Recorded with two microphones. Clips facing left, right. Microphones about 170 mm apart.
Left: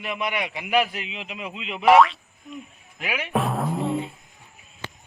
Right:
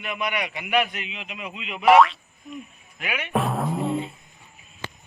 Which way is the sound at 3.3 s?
Centre (ahead or behind).